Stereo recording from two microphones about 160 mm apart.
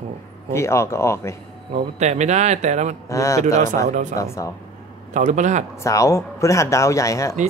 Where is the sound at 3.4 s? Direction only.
50° right (ahead or behind).